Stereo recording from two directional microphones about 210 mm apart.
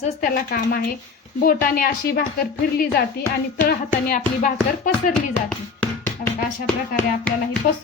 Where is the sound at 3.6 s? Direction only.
40° left (ahead or behind).